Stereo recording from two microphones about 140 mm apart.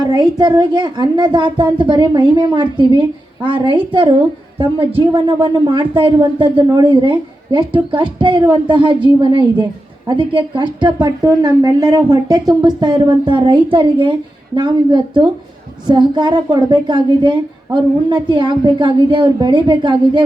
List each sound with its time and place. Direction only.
0.0 s a woman's voice: 30° right (ahead or behind)